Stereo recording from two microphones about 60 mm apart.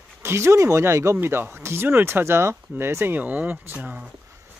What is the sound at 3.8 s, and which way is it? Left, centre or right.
Speech, right.